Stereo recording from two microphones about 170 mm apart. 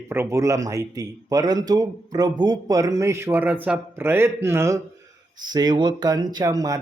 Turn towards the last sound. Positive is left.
turn(degrees=-20)  # may be behind; listen again after turning